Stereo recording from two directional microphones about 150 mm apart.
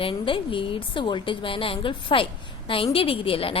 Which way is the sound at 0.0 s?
35° left (ahead or behind).